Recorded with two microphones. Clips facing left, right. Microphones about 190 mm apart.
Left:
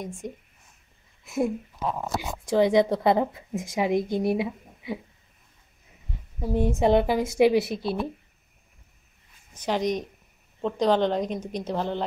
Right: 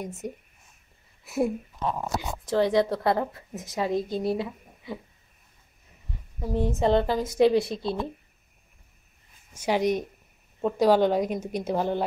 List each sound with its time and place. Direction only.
0.0 s a woman's voice: 5° right (ahead or behind); by 5.0 s 15° left (ahead or behind)
6.4 s a woman's voice: 10° left (ahead or behind)
9.5 s a woman's voice: 10° right (ahead or behind)